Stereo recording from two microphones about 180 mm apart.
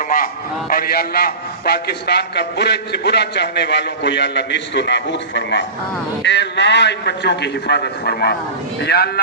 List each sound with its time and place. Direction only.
0.7 s a man's voice: 55° left (ahead or behind)